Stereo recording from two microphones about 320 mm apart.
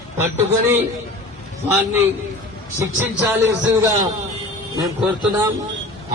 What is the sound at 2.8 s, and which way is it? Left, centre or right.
A man's voice, centre.